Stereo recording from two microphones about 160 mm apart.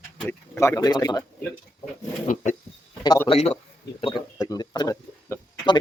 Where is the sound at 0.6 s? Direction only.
20° left (ahead or behind).